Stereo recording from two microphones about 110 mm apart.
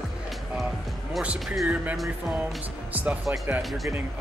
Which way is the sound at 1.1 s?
10° right (ahead or behind).